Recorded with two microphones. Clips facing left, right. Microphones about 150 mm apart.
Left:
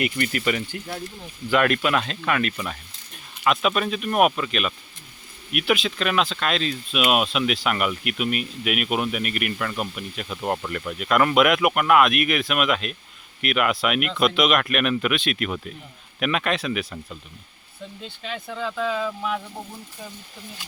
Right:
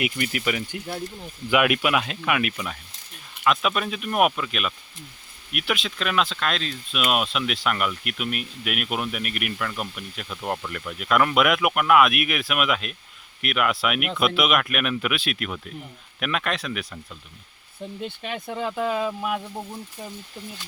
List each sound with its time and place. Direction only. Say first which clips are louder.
0.0 s speech: left 2 dB; 5° right (ahead or behind)
3.4 s speech: left 1 dB; centre (ahead or behind)
18.2 s speech: left 1 dB; 20° right (ahead or behind)